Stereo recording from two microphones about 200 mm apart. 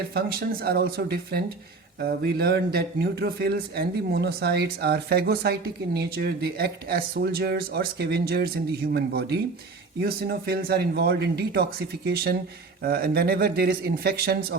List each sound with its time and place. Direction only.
0.1 s speech: 50° right (ahead or behind)